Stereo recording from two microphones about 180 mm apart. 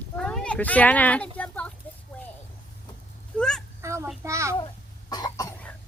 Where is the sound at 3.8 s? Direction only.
15° right (ahead or behind).